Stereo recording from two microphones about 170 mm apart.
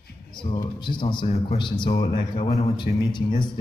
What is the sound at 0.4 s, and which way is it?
Speech, 30° left (ahead or behind).